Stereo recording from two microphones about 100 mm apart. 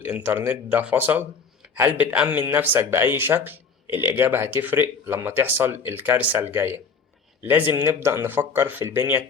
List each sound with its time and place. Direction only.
0.0 s speech: 20° right (ahead or behind)